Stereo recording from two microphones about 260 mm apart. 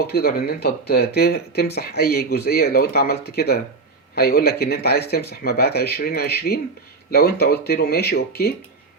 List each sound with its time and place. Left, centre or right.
0.0 s speech: left